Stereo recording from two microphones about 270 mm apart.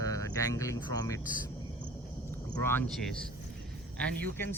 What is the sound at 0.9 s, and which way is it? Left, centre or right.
Speech, centre.